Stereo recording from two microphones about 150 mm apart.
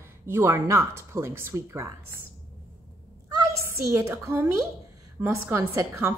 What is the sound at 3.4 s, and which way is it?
A woman's voice, 20° right (ahead or behind).